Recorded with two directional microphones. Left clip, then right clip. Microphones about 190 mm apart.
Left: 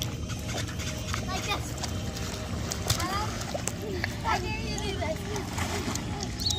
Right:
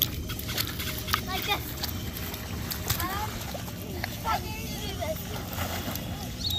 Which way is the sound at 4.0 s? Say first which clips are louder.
Even; 5° left (ahead or behind).